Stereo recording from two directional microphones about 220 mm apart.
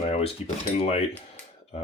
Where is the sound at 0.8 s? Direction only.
30° left (ahead or behind).